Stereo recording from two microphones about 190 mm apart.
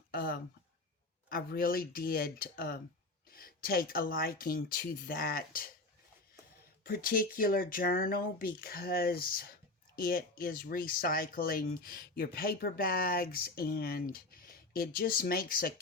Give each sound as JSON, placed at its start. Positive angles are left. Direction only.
{"t": 0.1, "sound": "a sound", "side_deg": 55}
{"t": 1.3, "sound": "speech", "side_deg": 50}
{"t": 6.8, "sound": "speech", "side_deg": 50}